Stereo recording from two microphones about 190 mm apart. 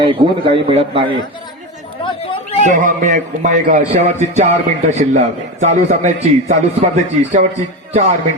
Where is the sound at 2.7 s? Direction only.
40° right (ahead or behind).